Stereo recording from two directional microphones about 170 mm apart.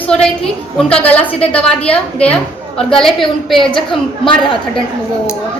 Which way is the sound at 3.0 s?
Centre (ahead or behind).